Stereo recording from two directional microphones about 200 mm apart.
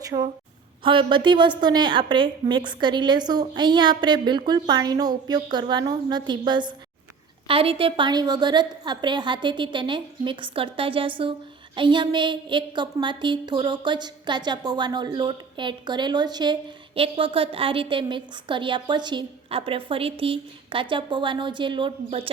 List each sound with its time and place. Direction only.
0.0 s a woman's voice: 20° right (ahead or behind)